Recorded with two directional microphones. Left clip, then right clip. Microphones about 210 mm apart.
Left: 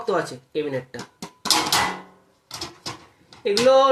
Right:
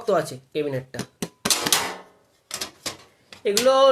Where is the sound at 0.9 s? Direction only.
25° right (ahead or behind).